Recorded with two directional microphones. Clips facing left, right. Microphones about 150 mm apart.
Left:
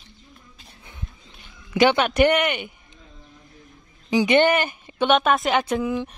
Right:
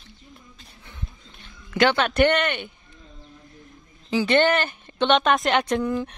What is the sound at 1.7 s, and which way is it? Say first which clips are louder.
Speech: left 2 dB; 10° left (ahead or behind).